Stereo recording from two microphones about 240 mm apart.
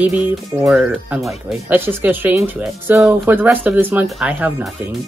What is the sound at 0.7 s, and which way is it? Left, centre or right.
Speech, centre.